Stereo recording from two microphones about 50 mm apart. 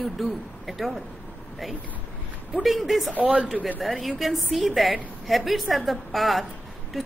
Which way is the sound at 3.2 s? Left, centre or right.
Right.